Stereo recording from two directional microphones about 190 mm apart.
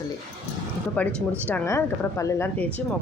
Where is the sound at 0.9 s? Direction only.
10° left (ahead or behind).